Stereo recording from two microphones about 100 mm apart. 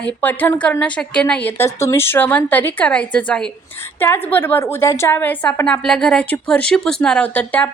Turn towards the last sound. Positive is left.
turn(degrees=15)  # may be behind; listen again after turning